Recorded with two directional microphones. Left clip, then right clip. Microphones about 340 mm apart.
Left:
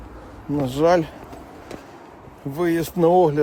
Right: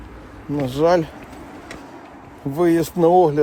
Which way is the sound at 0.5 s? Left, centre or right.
Centre.